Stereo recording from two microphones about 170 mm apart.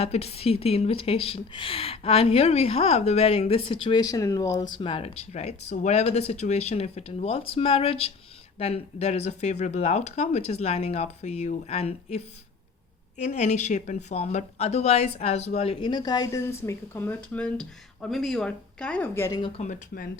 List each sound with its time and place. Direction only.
0.0 s a woman's voice: 40° left (ahead or behind); by 19.4 s 15° left (ahead or behind)
19.6 s speech: 40° left (ahead or behind)